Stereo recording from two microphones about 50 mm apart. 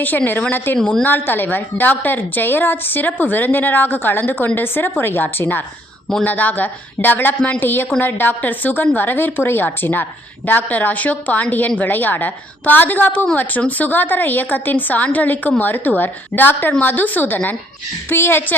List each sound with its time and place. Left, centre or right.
0.5 s a woman's voice: left
0.8 s a woman's voice: centre
1.0 s a woman's voice: left
6.2 s a woman's voice: left
18.1 s a woman's voice: left